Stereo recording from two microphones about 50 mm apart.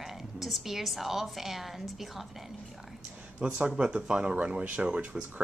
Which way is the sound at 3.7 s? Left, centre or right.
Centre.